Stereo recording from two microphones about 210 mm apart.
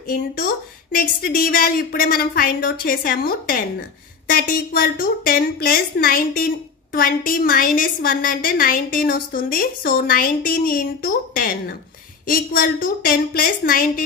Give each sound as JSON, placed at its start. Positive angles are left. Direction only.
{"t": 0.9, "sound": "a woman's voice", "side_deg": 45}